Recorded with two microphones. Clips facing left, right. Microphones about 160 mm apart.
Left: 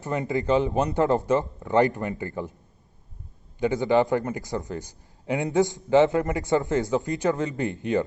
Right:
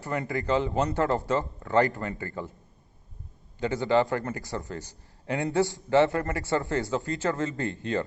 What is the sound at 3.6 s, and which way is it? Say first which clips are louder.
A man's voice: left 3 dB; 15° left (ahead or behind).